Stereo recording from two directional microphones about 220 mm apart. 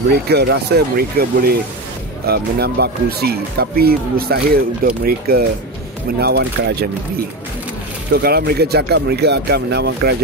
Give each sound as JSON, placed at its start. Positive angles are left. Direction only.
{"t": 0.1, "sound": "speech", "side_deg": -45}
{"t": 8.1, "sound": "speech", "side_deg": -45}